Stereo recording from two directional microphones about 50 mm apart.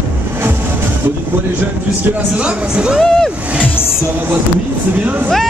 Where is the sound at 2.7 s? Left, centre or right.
Right.